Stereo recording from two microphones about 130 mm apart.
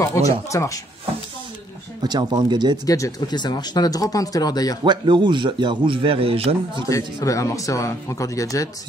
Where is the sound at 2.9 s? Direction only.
30° left (ahead or behind).